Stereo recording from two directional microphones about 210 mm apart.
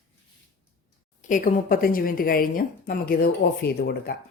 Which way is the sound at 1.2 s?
35° left (ahead or behind).